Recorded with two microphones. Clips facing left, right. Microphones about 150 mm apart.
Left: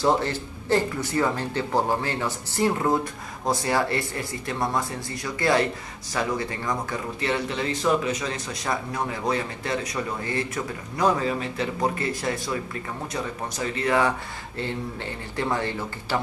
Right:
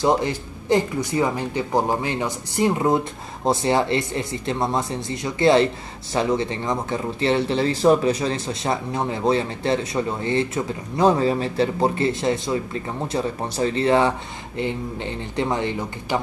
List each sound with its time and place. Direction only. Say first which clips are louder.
0.0 s speech: right 2 dB; 15° right (ahead or behind)